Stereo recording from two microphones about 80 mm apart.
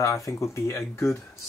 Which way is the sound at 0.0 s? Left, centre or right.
Left.